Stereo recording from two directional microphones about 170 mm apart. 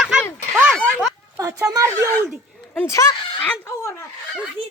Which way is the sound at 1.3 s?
15° right (ahead or behind).